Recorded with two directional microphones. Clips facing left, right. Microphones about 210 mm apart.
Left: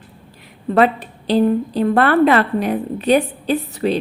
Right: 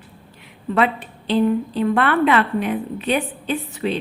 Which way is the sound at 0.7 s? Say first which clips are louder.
Left 5 dB; 40° left (ahead or behind).